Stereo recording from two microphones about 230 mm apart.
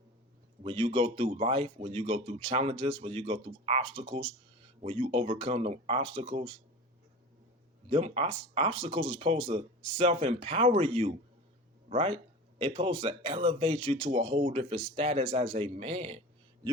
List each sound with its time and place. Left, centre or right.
0.6 s speech: right
7.9 s speech: right